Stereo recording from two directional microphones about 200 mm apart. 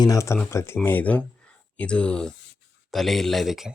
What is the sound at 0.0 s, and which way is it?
Speech, 15° left (ahead or behind).